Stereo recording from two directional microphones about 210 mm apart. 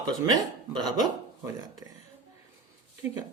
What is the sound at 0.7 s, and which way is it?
Speech, 20° right (ahead or behind).